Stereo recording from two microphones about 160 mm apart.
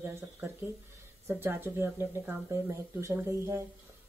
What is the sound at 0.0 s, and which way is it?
Speech, 15° right (ahead or behind).